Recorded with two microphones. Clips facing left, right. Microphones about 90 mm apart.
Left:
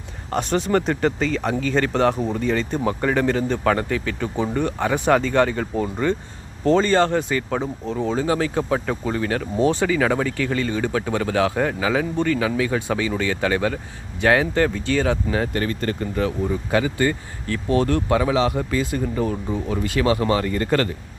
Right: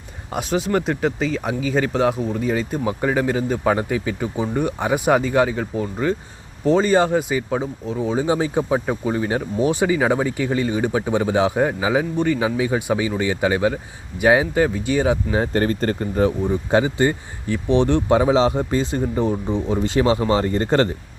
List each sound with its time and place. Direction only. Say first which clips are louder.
0.3 s speech: left 1 dB; 5° right (ahead or behind)
15.4 s speech: right 4 dB; 35° right (ahead or behind)